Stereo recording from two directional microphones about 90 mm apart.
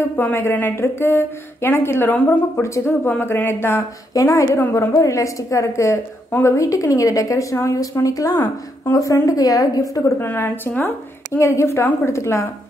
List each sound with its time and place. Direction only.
0.1 s speech: 25° left (ahead or behind)
4.1 s a woman's voice: 40° left (ahead or behind)
10.1 s a woman's voice: 25° left (ahead or behind)